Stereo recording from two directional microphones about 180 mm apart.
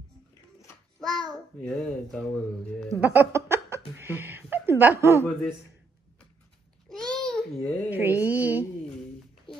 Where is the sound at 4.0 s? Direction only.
15° right (ahead or behind).